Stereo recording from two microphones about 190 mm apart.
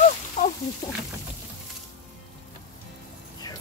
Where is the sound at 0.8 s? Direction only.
20° left (ahead or behind).